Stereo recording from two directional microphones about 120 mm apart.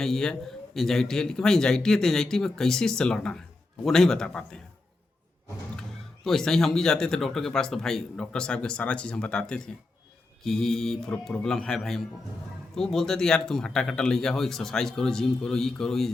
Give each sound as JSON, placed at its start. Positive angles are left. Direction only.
{"t": 0.0, "sound": "a man's voice", "side_deg": 5}
{"t": 6.2, "sound": "a man's voice", "side_deg": 5}